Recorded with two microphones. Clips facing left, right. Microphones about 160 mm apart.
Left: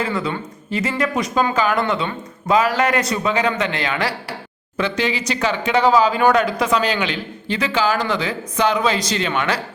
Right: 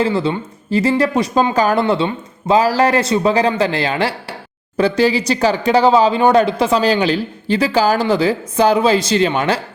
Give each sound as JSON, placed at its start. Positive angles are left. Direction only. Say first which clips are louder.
{"t": 0.0, "sound": "speech", "louder": "right 6 dB", "side_deg": -30}